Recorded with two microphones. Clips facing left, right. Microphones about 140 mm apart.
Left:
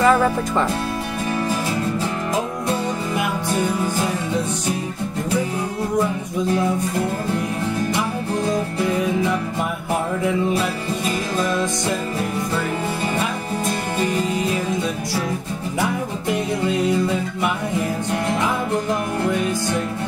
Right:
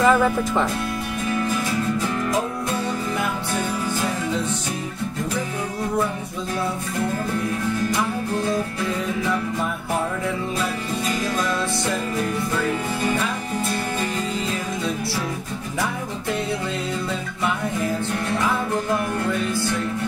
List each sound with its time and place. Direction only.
0.0 s speech: centre (ahead or behind)